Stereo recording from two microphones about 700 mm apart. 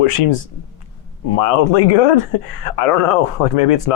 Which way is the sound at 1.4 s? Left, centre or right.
Left.